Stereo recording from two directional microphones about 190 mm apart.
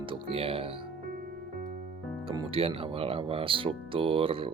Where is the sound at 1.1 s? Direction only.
55° right (ahead or behind).